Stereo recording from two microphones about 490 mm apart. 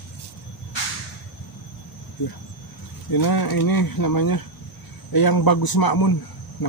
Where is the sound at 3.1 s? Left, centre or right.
Left.